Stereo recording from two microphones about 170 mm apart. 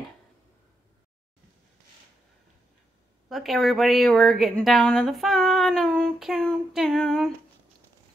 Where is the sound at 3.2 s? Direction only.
Centre (ahead or behind).